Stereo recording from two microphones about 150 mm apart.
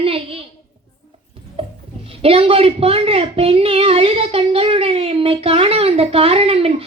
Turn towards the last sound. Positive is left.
turn(degrees=-40)  # may be behind; listen again after turning